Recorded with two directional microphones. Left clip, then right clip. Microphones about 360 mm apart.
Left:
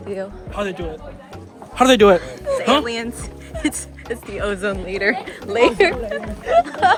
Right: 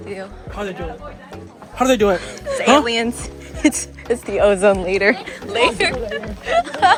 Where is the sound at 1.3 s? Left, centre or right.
Centre.